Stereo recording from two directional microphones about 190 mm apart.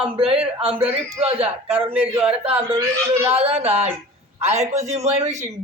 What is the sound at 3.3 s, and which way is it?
A man's voice, 30° right (ahead or behind).